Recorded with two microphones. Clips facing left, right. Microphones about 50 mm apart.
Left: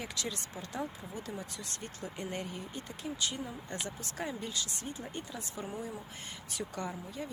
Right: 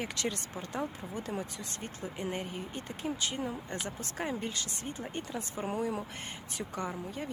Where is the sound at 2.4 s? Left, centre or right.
Right.